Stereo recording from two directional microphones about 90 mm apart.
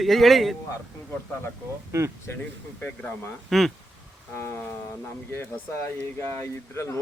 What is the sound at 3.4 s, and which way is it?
Speech, centre (ahead or behind).